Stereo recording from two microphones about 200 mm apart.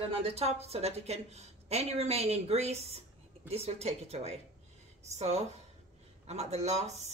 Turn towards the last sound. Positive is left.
turn(degrees=-35)  # may be behind; listen again after turning